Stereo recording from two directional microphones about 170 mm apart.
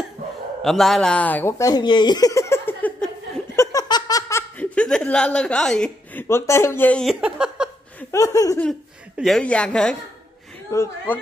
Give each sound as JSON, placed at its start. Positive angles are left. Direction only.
{"t": 0.6, "sound": "speech", "side_deg": 0}
{"t": 3.5, "sound": "giggle", "side_deg": 20}
{"t": 6.2, "sound": "speech", "side_deg": 15}
{"t": 8.1, "sound": "laughter", "side_deg": 20}
{"t": 9.1, "sound": "speech", "side_deg": 0}
{"t": 10.7, "sound": "speech", "side_deg": 15}